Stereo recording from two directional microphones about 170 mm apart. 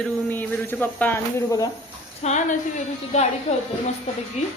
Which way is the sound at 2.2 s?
40° left (ahead or behind).